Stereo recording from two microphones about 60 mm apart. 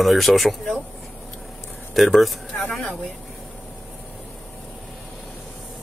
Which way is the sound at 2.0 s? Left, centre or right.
Centre.